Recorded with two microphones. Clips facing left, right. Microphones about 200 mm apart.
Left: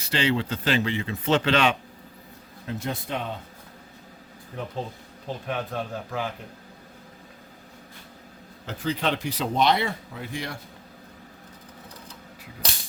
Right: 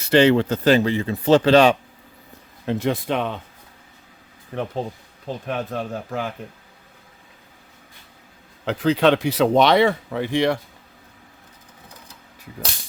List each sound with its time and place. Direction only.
0.0 s speech: 50° right (ahead or behind); by 1.7 s 35° right (ahead or behind)
2.6 s a man's voice: 80° right
4.5 s speech: 75° right (ahead or behind)
5.5 s speech: 45° right (ahead or behind)
8.6 s speech: 80° right